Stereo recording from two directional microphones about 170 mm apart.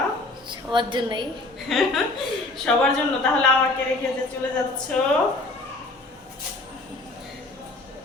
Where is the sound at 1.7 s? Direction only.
Centre (ahead or behind).